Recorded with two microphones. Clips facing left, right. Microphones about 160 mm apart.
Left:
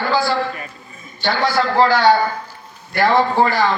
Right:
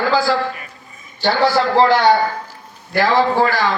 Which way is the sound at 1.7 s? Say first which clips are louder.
Right 1 dB; 20° right (ahead or behind).